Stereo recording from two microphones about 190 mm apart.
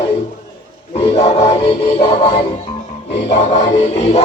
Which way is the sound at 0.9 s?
30° left (ahead or behind).